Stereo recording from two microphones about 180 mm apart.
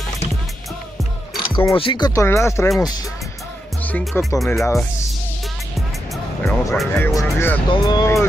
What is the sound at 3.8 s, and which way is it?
Speech, 5° left (ahead or behind).